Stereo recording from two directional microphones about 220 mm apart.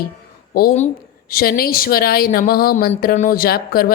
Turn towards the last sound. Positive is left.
turn(degrees=45)  # may be behind; listen again after turning